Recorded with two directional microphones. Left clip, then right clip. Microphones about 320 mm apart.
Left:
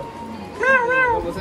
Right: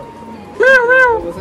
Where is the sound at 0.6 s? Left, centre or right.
Right.